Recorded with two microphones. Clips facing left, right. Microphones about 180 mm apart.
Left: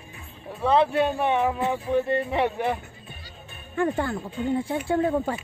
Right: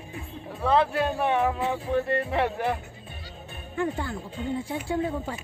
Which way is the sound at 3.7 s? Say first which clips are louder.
Left 4 dB; 60° left (ahead or behind).